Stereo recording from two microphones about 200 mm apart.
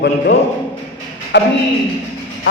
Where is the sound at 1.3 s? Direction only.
65° left (ahead or behind).